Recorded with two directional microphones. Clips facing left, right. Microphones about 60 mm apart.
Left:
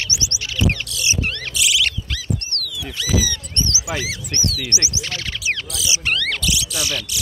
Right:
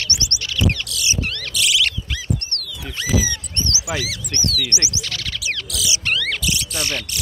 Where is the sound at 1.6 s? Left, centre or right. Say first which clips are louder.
Even; centre.